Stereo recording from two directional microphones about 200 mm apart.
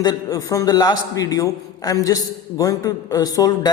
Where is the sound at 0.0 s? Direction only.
15° left (ahead or behind).